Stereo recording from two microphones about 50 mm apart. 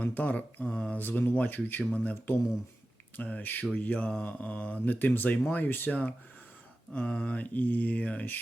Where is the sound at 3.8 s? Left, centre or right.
Left.